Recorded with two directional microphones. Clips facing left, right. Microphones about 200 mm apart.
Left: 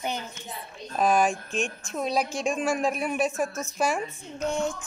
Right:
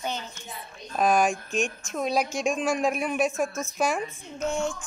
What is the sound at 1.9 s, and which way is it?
A woman's voice, centre (ahead or behind).